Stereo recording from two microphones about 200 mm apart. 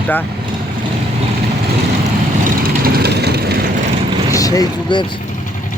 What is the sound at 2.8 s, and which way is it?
Vehicle, 50° right (ahead or behind).